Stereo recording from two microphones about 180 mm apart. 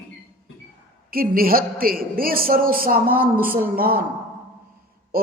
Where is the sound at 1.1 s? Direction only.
55° right (ahead or behind).